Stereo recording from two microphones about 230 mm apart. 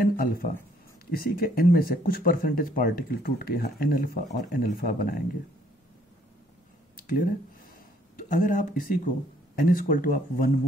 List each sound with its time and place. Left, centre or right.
0.0 s a sound: left
1.1 s speech: left
7.0 s speech: left